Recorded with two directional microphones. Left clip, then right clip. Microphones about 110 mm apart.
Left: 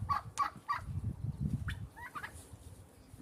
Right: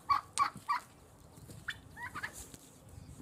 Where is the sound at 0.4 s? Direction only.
15° left (ahead or behind).